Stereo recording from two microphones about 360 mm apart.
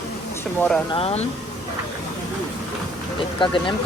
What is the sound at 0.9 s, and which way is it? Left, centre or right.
Speech, centre.